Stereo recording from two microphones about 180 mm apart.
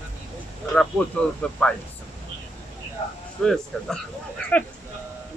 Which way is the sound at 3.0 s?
35° left (ahead or behind).